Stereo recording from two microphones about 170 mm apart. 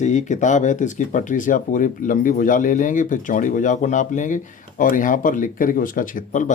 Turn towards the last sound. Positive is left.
turn(degrees=50)  # may be behind; listen again after turning